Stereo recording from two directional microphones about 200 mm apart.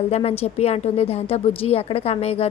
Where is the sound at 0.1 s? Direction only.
30° left (ahead or behind).